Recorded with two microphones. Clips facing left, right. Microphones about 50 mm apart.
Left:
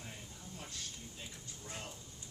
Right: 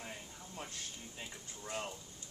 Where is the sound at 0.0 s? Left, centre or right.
Right.